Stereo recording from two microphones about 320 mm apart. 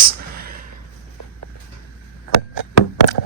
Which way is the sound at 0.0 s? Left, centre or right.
Right.